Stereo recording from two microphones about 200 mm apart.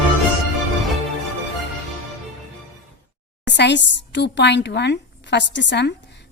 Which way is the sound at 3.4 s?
60° left (ahead or behind).